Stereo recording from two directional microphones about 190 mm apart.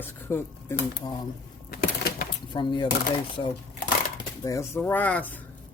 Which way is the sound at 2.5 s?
25° left (ahead or behind).